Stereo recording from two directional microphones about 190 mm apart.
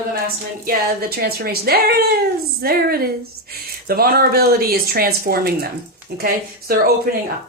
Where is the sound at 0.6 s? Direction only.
50° right (ahead or behind).